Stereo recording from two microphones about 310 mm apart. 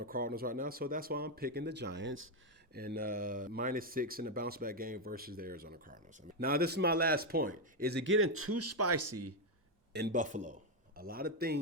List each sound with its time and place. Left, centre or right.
0.0 s speech: right
9.9 s speech: right